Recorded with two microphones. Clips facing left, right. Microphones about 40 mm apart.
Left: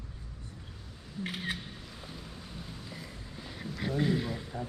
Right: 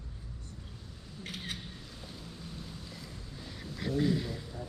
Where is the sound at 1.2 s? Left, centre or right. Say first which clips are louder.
Left 6 dB; centre.